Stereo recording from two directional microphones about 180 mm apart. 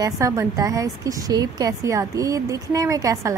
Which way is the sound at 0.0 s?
20° right (ahead or behind).